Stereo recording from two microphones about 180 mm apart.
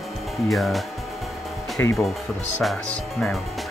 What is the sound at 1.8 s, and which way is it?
Speech, 15° left (ahead or behind).